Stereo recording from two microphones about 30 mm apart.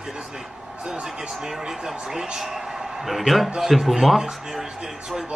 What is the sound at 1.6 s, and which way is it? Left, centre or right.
Speech, centre.